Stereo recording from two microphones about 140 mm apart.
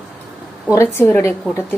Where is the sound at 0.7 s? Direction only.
15° left (ahead or behind).